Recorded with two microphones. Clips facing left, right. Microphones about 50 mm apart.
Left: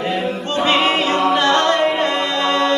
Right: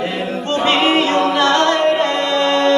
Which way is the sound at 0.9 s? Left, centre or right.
Centre.